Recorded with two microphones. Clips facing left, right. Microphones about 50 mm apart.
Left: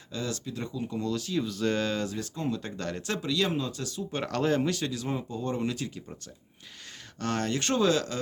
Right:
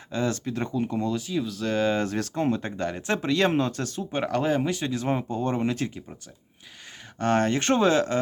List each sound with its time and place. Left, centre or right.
0.1 s speech: right
0.9 s speech: right
1.3 s speech: centre
2.0 s speech: right
2.5 s speech: right
2.8 s speech: centre
3.2 s speech: right
4.1 s speech: centre
4.9 s speech: right
7.2 s speech: right